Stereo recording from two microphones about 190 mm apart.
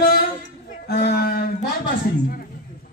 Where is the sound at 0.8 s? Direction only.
55° left (ahead or behind).